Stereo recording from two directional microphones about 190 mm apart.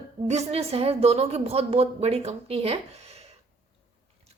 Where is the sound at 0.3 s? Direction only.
35° right (ahead or behind).